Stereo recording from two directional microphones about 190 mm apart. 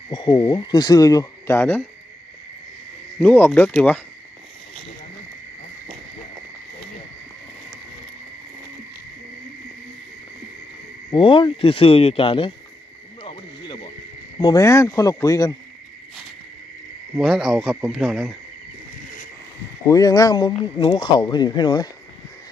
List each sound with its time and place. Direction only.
0.1 s speech: 25° left (ahead or behind)
3.2 s speech: 10° left (ahead or behind)
11.1 s speech: 25° left (ahead or behind)
13.2 s frog: 25° left (ahead or behind)
14.4 s speech: 20° left (ahead or behind)
17.2 s speech: centre (ahead or behind)
19.9 s speech: 20° left (ahead or behind)